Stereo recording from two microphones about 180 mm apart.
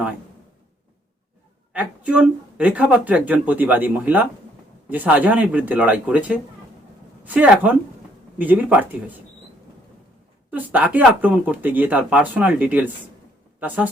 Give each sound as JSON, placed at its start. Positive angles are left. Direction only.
{"t": 1.7, "sound": "speech", "side_deg": -5}
{"t": 10.5, "sound": "speech", "side_deg": -10}